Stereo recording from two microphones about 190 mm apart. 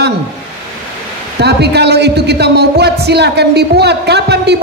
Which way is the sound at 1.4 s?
60° right (ahead or behind).